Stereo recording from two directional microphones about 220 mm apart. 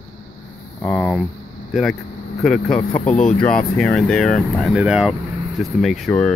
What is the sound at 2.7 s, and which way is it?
Speech, 35° left (ahead or behind).